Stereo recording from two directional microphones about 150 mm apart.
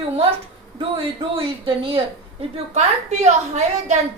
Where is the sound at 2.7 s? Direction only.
50° right (ahead or behind).